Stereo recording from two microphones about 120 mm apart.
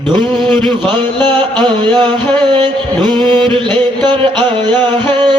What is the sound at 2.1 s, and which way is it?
Speech, 15° left (ahead or behind).